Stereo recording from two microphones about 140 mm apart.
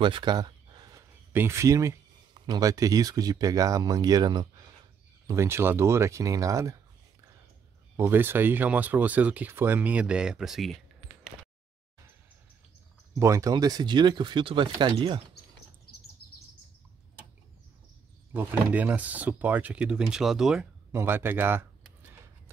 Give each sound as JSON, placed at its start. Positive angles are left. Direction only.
{"t": 0.0, "sound": "a sound", "side_deg": -35}
{"t": 1.3, "sound": "speech", "side_deg": -15}
{"t": 5.2, "sound": "speech", "side_deg": -20}
{"t": 7.9, "sound": "speech", "side_deg": -15}
{"t": 13.1, "sound": "speech", "side_deg": -20}
{"t": 18.3, "sound": "speech", "side_deg": -10}
{"t": 20.9, "sound": "speech", "side_deg": -15}